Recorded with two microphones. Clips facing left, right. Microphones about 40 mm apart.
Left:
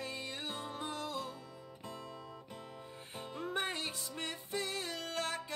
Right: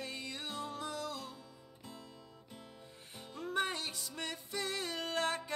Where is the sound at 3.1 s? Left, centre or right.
Left.